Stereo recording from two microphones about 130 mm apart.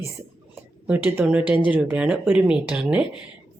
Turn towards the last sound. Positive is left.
turn(degrees=-10)  # may be behind; listen again after turning